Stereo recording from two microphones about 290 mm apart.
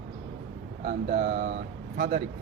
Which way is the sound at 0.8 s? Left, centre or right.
Right.